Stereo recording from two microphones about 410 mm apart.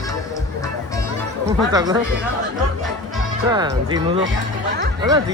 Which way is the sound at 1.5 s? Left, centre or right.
Centre.